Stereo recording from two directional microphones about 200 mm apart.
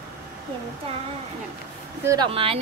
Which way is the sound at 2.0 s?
20° right (ahead or behind).